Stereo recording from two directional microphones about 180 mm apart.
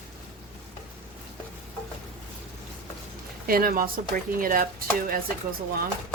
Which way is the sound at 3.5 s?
55° right (ahead or behind).